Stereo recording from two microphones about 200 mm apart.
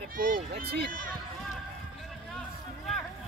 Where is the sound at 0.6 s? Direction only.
45° right (ahead or behind).